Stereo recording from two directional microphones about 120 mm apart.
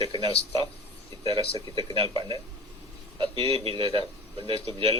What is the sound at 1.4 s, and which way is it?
A man's voice, 35° right (ahead or behind).